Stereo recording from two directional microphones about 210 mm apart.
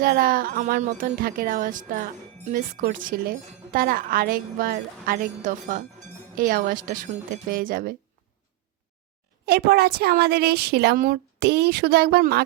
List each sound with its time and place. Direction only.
0.0 s speech: 45° right (ahead or behind)
9.5 s speech: 50° right (ahead or behind)